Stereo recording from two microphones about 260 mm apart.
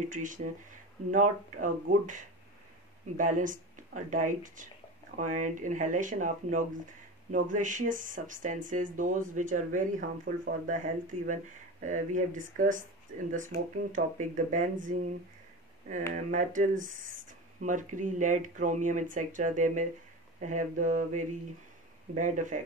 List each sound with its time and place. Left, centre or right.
0.1 s speech: right
16.1 s speech: right